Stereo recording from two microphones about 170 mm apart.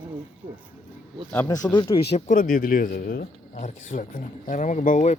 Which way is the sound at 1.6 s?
25° left (ahead or behind).